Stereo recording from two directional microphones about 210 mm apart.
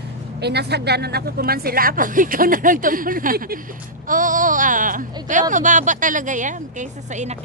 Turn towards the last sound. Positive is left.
turn(degrees=-35)  # may be behind; listen again after turning